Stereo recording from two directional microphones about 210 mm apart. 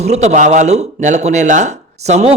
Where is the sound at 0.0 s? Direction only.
30° right (ahead or behind).